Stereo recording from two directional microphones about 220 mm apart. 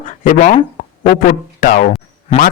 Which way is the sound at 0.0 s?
35° left (ahead or behind).